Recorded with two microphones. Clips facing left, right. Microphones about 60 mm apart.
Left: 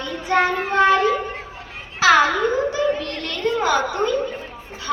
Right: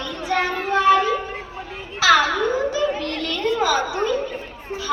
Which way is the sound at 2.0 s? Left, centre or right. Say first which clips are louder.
Left 1 dB; left.